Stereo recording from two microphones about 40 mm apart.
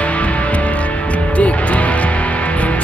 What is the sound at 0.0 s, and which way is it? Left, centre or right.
Music, left.